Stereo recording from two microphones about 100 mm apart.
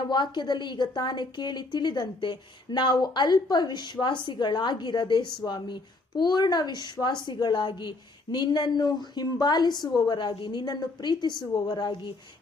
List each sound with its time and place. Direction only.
0.1 s a woman's voice: 50° left (ahead or behind)